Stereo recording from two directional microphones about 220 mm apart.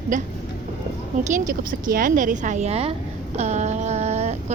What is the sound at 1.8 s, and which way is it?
A woman's voice, 40° right (ahead or behind).